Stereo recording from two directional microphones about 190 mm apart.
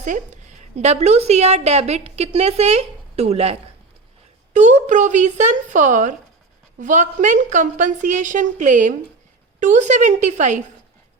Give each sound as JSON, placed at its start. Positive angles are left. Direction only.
{"t": 0.0, "sound": "a woman's voice", "side_deg": -40}